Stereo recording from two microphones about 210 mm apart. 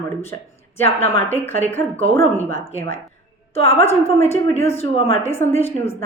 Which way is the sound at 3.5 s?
30° left (ahead or behind).